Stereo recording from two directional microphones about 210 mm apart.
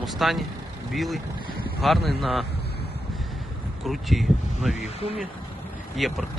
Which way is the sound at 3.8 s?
Centre (ahead or behind).